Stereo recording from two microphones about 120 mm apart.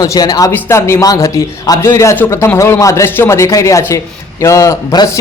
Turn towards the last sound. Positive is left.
turn(degrees=30)  # may be behind; listen again after turning